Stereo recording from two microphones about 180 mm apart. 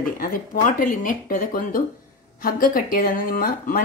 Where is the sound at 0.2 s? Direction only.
50° left (ahead or behind).